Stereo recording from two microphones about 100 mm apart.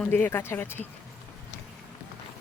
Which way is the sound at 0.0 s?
20° left (ahead or behind).